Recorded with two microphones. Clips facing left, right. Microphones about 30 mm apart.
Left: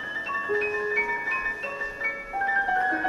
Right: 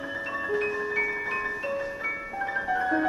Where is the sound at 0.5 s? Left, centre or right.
Centre.